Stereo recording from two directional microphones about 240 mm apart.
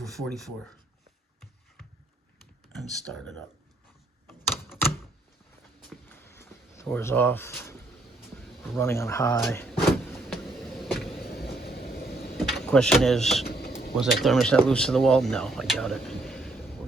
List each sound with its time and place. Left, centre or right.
0.0 s speech: centre
2.9 s speech: centre
4.3 s a sound: centre
5.9 s a sound: centre
8.8 s speech: centre
9.4 s vehicle: centre
11.2 s vehicle: left
12.5 s speech: centre
13.5 s a sound: left
13.9 s speech: centre